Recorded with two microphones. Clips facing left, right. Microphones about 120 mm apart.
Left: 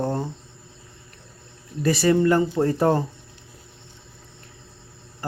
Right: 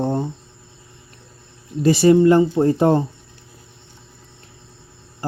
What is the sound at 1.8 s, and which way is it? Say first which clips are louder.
Speech: right 6 dB; 25° right (ahead or behind).